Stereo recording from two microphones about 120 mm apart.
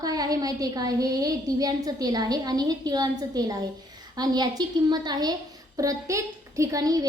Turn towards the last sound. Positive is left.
turn(degrees=-30)  # may be behind; listen again after turning